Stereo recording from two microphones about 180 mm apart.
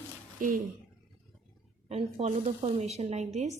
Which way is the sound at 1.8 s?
35° right (ahead or behind).